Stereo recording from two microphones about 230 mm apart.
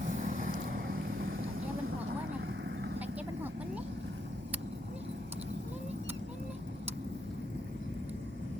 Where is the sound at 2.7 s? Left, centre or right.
Right.